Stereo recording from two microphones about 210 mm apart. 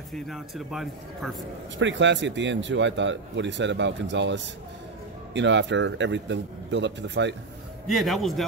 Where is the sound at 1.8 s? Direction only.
60° right (ahead or behind).